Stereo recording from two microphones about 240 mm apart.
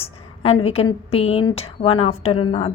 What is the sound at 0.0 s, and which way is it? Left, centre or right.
A woman's voice, left.